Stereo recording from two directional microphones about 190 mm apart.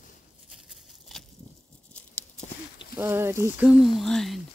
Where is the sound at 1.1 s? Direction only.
Centre (ahead or behind).